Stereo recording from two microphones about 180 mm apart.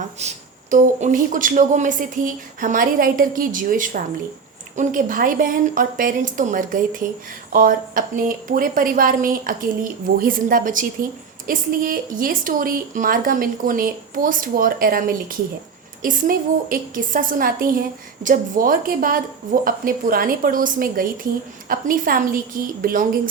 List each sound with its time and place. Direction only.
0.2 s a woman's voice: 40° right (ahead or behind)